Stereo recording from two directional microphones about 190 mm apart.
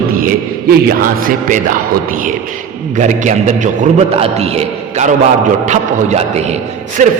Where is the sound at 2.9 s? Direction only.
40° right (ahead or behind).